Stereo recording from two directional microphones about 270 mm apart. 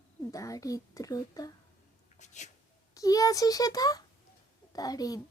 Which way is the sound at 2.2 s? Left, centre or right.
Left.